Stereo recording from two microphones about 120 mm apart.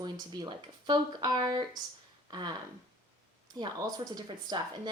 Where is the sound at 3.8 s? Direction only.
35° right (ahead or behind).